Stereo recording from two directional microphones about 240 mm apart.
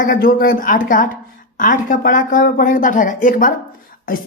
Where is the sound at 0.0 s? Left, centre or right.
Left.